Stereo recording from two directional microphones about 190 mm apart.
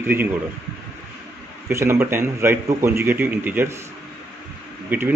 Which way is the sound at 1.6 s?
15° right (ahead or behind).